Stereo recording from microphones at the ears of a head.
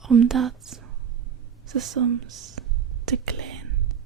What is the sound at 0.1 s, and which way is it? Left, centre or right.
Speech, right.